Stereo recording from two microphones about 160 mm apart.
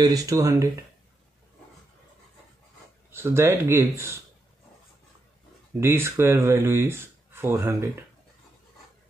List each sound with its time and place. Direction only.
0.0 s speech: 20° right (ahead or behind)
3.1 s speech: 15° right (ahead or behind)
5.8 s speech: 15° right (ahead or behind)